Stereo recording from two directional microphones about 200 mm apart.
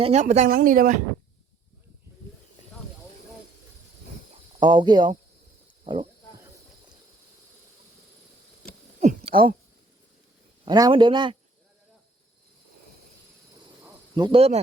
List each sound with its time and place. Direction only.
0.0 s speech: 35° right (ahead or behind)
4.6 s a man's voice: 25° right (ahead or behind)
9.0 s a sound: 35° right (ahead or behind)
10.7 s a man's voice: 20° right (ahead or behind)
13.8 s cricket: 20° right (ahead or behind)